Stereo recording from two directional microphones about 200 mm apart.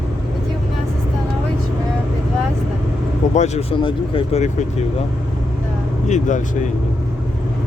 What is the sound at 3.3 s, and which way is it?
Speech, 35° left (ahead or behind).